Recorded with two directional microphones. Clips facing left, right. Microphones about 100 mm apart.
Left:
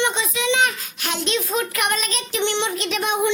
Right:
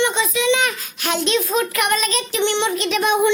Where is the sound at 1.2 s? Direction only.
90° right.